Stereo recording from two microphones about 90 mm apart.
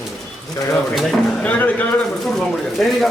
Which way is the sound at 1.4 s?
15° left (ahead or behind).